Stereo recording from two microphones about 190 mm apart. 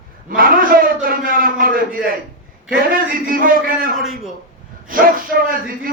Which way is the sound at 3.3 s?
50° right (ahead or behind).